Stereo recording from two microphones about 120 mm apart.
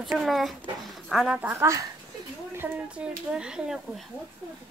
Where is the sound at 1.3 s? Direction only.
15° right (ahead or behind).